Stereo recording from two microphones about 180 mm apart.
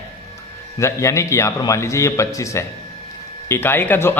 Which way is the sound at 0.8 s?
15° left (ahead or behind).